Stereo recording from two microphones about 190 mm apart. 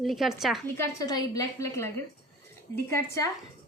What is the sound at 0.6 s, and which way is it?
A woman's voice, 15° left (ahead or behind).